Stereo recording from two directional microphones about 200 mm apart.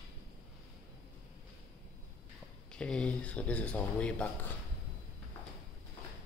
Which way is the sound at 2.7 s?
5° left (ahead or behind).